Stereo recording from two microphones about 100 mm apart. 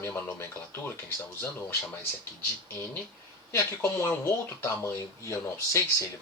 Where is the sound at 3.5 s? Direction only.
25° left (ahead or behind).